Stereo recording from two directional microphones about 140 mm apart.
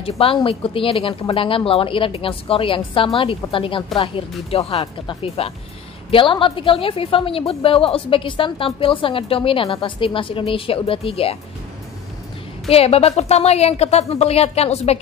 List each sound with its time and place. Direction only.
0.0 s a woman's voice: 40° left (ahead or behind)
12.6 s a woman's voice: 45° left (ahead or behind)